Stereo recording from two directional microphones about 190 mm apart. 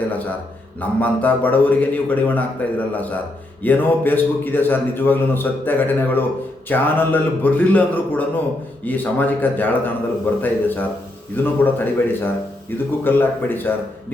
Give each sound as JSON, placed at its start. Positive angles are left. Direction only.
{"t": 0.8, "sound": "a man's voice", "side_deg": 10}